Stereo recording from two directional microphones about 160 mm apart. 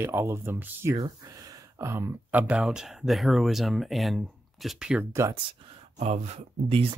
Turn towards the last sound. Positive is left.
turn(degrees=-40)  # may be behind; listen again after turning